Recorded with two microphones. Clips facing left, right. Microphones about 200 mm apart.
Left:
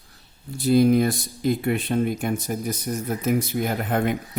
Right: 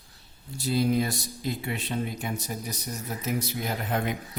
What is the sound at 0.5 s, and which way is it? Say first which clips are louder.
Speech: left 8 dB; 55° left (ahead or behind).